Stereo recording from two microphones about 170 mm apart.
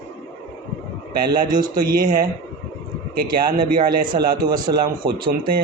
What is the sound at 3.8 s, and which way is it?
A man's voice, 60° right (ahead or behind).